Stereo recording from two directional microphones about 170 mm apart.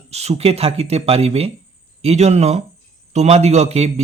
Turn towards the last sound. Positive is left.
turn(degrees=-40)  # may be behind; listen again after turning